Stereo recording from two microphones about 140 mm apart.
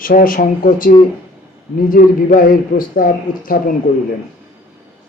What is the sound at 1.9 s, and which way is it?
Speech, 85° left.